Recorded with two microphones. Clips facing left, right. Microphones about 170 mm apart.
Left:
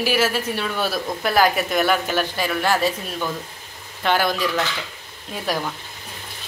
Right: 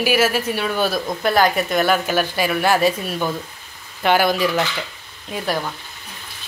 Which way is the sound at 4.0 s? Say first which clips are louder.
Right 4 dB; 10° right (ahead or behind).